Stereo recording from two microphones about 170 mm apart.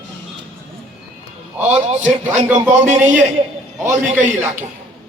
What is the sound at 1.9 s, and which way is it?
A man's voice, 45° right (ahead or behind).